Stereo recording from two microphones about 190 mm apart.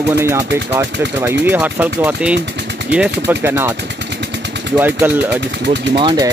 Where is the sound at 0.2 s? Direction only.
15° right (ahead or behind).